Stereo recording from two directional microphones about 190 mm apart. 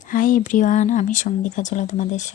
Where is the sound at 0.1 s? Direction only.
45° left (ahead or behind).